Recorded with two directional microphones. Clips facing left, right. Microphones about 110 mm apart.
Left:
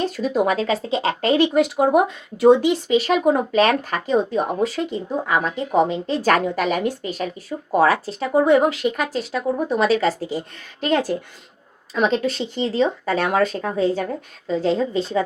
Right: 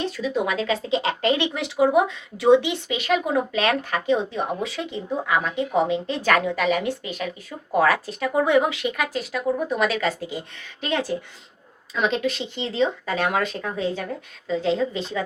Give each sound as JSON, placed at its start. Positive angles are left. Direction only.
{"t": 0.0, "sound": "speech", "side_deg": 45}
{"t": 1.5, "sound": "speech", "side_deg": 50}
{"t": 10.8, "sound": "speech", "side_deg": 50}